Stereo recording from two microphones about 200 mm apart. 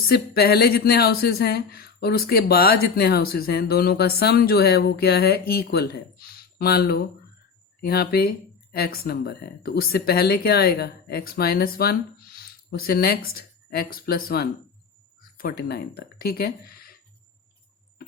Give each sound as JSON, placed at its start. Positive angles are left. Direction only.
{"t": 0.0, "sound": "speech", "side_deg": 50}